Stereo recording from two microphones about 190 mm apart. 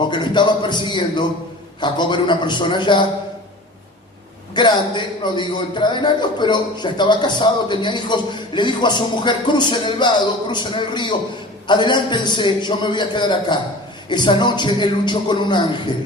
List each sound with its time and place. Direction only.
0.1 s a man's voice: 25° left (ahead or behind)
4.5 s a man's voice: 25° left (ahead or behind)